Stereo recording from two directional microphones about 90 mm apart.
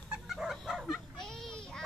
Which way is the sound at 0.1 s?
5° right (ahead or behind).